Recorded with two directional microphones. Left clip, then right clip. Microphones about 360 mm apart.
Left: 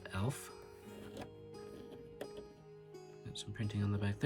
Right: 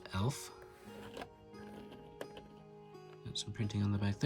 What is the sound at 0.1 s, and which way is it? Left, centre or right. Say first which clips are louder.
Music: right 3 dB; centre.